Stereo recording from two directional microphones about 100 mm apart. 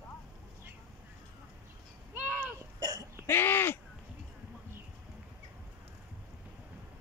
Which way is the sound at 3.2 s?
20° left (ahead or behind).